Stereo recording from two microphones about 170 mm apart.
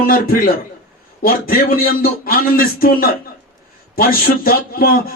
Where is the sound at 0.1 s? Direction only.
55° left (ahead or behind).